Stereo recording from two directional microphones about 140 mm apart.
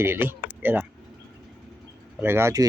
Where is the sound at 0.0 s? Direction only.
15° right (ahead or behind).